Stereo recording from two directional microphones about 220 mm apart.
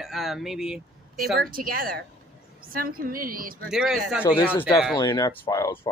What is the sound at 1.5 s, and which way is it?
Speech, 40° right (ahead or behind).